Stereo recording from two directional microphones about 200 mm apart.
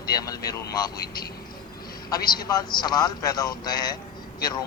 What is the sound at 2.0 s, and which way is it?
A man's voice, 20° left (ahead or behind).